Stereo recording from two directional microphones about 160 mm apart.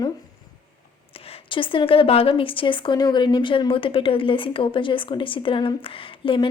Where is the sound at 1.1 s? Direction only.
35° left (ahead or behind).